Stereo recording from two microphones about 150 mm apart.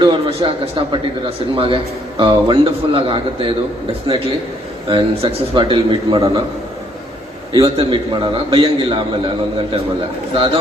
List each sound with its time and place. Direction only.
0.0 s a man's voice: 35° right (ahead or behind)
4.9 s a man's voice: 35° right (ahead or behind)
7.5 s a man's voice: 35° right (ahead or behind)
10.3 s a man's voice: 35° right (ahead or behind)